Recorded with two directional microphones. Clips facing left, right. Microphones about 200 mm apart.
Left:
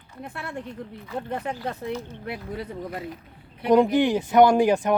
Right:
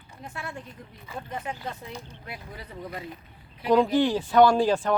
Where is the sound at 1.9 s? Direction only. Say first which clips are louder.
Left 9 dB; 15° right (ahead or behind).